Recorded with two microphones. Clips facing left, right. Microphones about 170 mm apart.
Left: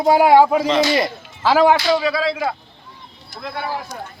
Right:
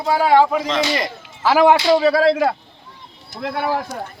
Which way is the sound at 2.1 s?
50° right (ahead or behind).